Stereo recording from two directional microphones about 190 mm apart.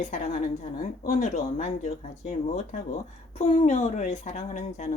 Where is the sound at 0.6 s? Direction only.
40° left (ahead or behind).